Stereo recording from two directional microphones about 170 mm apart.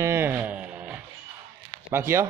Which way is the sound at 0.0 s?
15° right (ahead or behind).